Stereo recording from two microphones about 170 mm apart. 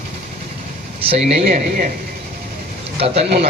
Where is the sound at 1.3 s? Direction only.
45° right (ahead or behind).